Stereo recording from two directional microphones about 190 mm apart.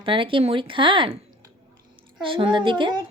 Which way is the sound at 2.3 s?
25° right (ahead or behind).